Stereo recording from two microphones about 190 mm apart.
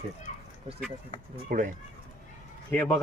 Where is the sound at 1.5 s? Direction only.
45° right (ahead or behind).